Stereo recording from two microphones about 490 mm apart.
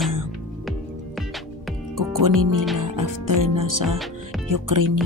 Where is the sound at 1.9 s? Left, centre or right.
Right.